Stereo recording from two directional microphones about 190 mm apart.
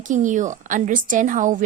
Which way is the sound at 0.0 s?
40° right (ahead or behind).